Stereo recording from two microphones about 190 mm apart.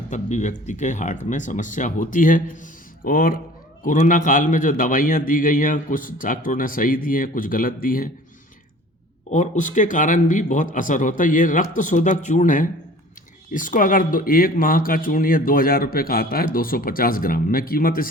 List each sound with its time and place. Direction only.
0.1 s speech: 40° left (ahead or behind)
9.3 s speech: 40° left (ahead or behind)